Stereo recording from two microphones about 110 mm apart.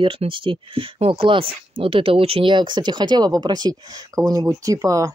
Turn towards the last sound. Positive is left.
turn(degrees=-30)  # may be behind; listen again after turning